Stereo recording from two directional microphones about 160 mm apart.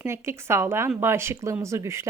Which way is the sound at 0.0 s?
15° right (ahead or behind).